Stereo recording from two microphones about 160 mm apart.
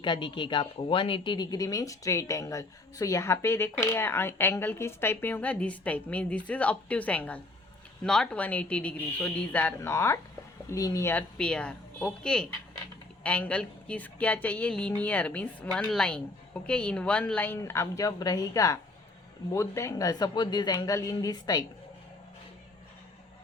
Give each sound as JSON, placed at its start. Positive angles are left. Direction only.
{"t": 0.0, "sound": "speech", "side_deg": 30}